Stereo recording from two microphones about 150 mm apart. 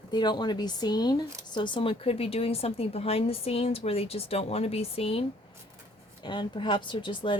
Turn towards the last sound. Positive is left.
turn(degrees=30)  # may be behind; listen again after turning